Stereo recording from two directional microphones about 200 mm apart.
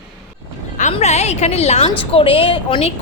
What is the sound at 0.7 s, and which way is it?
A woman's voice, 35° left (ahead or behind).